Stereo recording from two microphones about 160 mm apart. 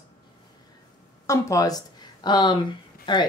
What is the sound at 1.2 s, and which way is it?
Speech, 20° left (ahead or behind).